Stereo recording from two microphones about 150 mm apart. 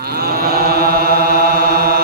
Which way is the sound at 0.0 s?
90° right.